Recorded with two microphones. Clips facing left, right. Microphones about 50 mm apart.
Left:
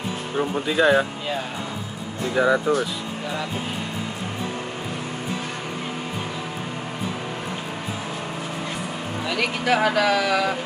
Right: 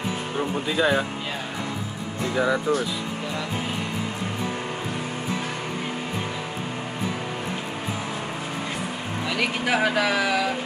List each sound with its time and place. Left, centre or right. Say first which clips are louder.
0.4 s speech: left 3 dB; centre
2.3 s speech: left 4 dB; centre
9.4 s speech: left 2 dB; centre